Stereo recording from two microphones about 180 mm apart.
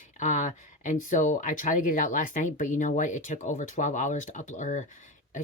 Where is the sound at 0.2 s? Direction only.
45° left (ahead or behind).